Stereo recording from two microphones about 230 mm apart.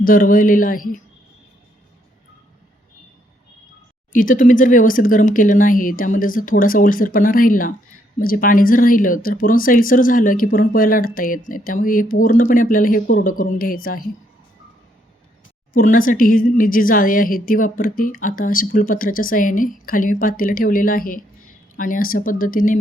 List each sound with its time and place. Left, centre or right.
0.0 s a woman's voice: left
4.1 s a woman's voice: left
15.7 s a woman's voice: left